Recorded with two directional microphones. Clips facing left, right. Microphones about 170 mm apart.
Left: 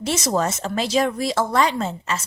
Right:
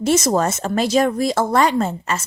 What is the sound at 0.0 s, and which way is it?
A woman's voice, 45° right (ahead or behind).